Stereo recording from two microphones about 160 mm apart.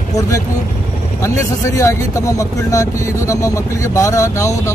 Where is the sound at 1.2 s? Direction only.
20° left (ahead or behind).